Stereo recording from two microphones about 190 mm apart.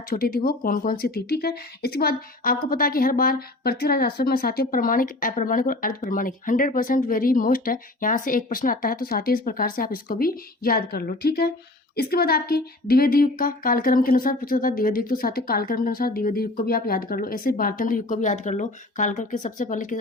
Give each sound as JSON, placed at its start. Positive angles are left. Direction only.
{"t": 0.1, "sound": "speech", "side_deg": 50}